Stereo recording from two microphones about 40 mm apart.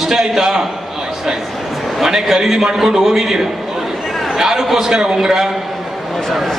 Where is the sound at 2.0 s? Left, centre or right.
Centre.